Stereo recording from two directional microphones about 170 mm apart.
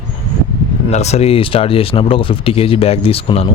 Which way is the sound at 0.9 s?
40° left (ahead or behind).